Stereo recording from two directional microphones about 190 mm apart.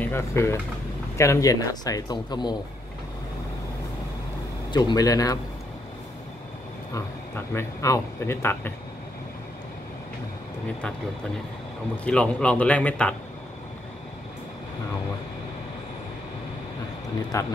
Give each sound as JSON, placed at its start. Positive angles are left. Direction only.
{"t": 0.0, "sound": "speech", "side_deg": 15}
{"t": 4.7, "sound": "speech", "side_deg": 20}
{"t": 6.9, "sound": "speech", "side_deg": 15}
{"t": 12.0, "sound": "speech", "side_deg": 5}
{"t": 17.3, "sound": "speech", "side_deg": 20}